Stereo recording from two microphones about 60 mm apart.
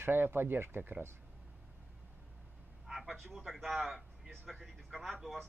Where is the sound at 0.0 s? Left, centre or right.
Right.